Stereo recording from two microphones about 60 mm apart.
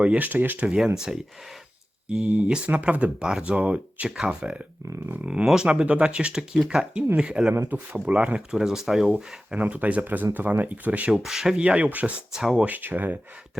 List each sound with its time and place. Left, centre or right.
0.0 s speech: right
0.9 s speech: centre
2.0 s speech: centre
4.2 s speech: centre
8.5 s speech: centre
9.1 s speech: right
11.1 s speech: centre; by 12.1 s right
12.3 s speech: centre
12.5 s speech: right